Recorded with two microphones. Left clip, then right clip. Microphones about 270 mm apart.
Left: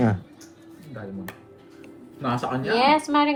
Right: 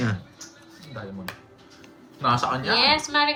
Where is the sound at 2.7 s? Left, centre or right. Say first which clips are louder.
Left 2 dB; centre.